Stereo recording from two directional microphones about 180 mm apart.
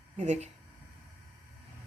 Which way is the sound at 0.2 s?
40° right (ahead or behind).